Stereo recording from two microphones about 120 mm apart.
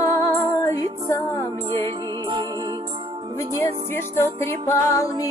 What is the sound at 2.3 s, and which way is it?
Music, 45° right (ahead or behind).